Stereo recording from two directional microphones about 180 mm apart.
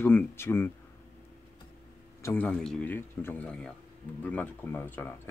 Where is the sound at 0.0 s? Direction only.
10° left (ahead or behind).